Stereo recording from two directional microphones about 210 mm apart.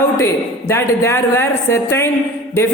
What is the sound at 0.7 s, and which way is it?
A man's voice, 10° left (ahead or behind).